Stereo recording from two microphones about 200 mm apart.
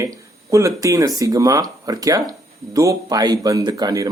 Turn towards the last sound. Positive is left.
turn(degrees=-20)  # may be behind; listen again after turning